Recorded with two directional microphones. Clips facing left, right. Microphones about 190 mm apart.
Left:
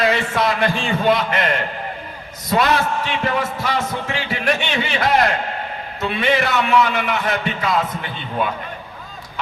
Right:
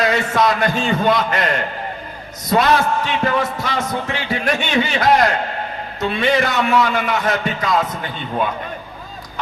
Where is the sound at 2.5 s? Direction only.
40° right (ahead or behind).